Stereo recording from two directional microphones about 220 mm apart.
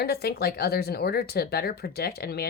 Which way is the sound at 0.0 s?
45° left (ahead or behind).